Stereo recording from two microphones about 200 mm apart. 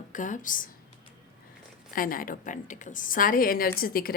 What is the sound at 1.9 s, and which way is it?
A woman's voice, 45° left (ahead or behind).